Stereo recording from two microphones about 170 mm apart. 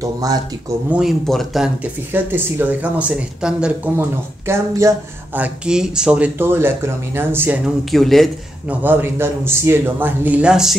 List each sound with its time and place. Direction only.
0.0 s speech: 20° right (ahead or behind)
0.8 s speech: 5° right (ahead or behind)
2.1 s speech: 10° right (ahead or behind)
7.9 s speech: centre (ahead or behind)
8.8 s speech: 10° right (ahead or behind)